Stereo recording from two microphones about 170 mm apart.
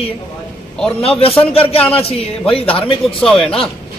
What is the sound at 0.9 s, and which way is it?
A man's voice, 35° left (ahead or behind).